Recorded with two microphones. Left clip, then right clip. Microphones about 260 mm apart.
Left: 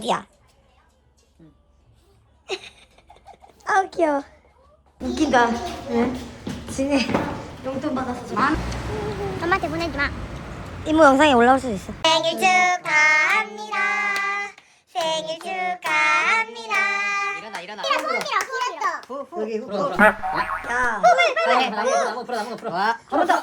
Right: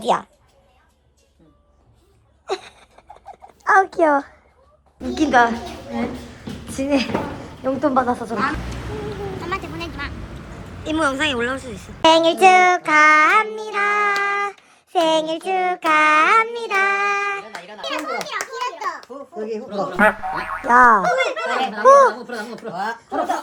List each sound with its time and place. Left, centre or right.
0.0 s a child's voice: centre
2.5 s a sound: centre
3.6 s a child's voice: centre
9.4 s a woman's voice: centre
12.0 s child singing: centre
17.5 s a child's voice: centre